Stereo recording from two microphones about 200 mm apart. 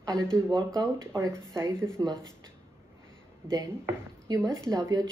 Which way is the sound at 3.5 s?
20° right (ahead or behind).